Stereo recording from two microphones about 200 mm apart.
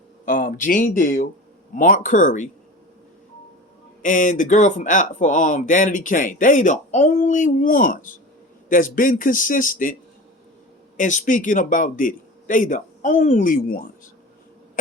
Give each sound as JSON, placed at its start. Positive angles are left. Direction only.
{"t": 0.3, "sound": "speech", "side_deg": 40}
{"t": 4.0, "sound": "speech", "side_deg": 40}
{"t": 10.9, "sound": "speech", "side_deg": 40}